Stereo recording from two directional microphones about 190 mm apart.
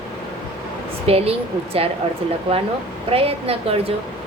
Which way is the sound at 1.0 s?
30° right (ahead or behind).